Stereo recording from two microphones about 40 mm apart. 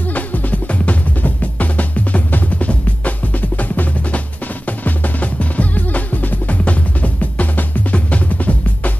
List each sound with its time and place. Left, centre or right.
0.1 s music: left
4.6 s drum: left